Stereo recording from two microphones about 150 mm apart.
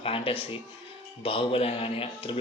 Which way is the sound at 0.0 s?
40° left (ahead or behind).